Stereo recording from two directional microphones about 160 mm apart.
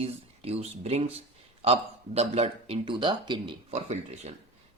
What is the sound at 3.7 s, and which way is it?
Speech, 45° right (ahead or behind).